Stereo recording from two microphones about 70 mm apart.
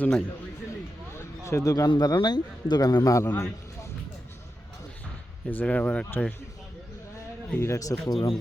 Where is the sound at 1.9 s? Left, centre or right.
Left.